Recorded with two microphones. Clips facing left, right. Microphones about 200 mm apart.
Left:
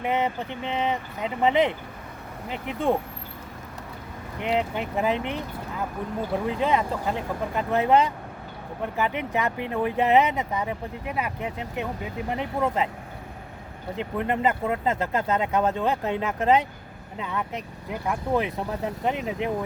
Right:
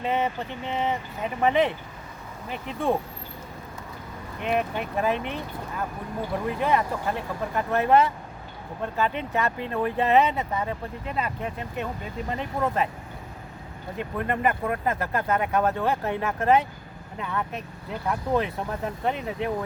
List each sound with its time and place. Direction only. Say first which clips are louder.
0.0 s speech: left 1 dB; 15° left (ahead or behind)
4.5 s speech: even; 20° left (ahead or behind)
13.9 s speech: left 2 dB; 20° left (ahead or behind)